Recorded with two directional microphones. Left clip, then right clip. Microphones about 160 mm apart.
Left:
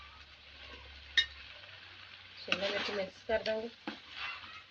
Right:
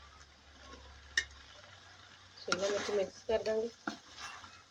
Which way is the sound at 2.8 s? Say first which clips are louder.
Right 2 dB; 25° right (ahead or behind).